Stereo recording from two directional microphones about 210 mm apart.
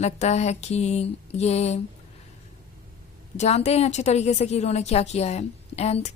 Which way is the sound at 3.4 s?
30° left (ahead or behind).